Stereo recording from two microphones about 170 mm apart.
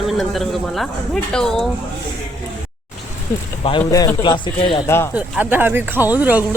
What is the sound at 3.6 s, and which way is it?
Speech, 25° left (ahead or behind).